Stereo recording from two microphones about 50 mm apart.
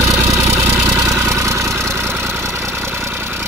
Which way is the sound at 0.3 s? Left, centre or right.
Right.